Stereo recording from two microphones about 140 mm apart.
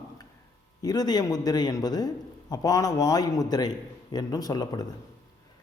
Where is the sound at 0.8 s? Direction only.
25° left (ahead or behind).